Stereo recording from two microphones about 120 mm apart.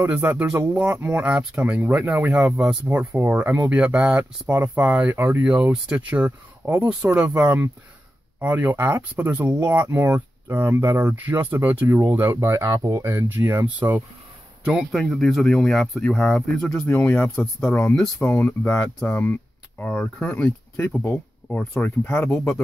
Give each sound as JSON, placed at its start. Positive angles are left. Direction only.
{"t": 0.0, "sound": "speech", "side_deg": -15}
{"t": 2.9, "sound": "speech", "side_deg": -20}
{"t": 12.4, "sound": "speech", "side_deg": -25}
{"t": 13.4, "sound": "speech", "side_deg": -15}
{"t": 16.7, "sound": "speech", "side_deg": 20}
{"t": 18.0, "sound": "speech", "side_deg": 10}
{"t": 21.8, "sound": "speech", "side_deg": 15}